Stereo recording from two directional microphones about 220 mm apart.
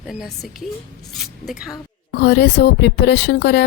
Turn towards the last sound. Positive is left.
turn(degrees=55)  # may be behind; listen again after turning